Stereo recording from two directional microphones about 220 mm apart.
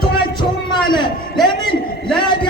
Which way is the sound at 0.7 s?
20° left (ahead or behind).